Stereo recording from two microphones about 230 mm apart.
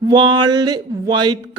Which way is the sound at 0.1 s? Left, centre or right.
Centre.